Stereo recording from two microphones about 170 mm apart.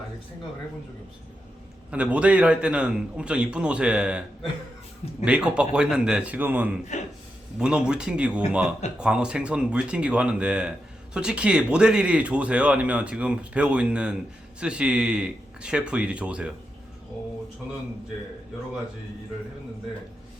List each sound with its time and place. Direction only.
1.9 s speech: 5° right (ahead or behind)
5.2 s a man's voice: 5° right (ahead or behind)
6.9 s speech: 45° left (ahead or behind)
7.6 s a man's voice: 5° right (ahead or behind)